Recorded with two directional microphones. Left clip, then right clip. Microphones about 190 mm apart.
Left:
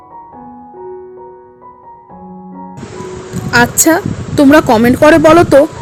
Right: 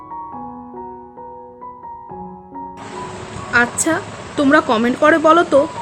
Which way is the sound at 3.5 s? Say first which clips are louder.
Left 7 dB; 30° left (ahead or behind).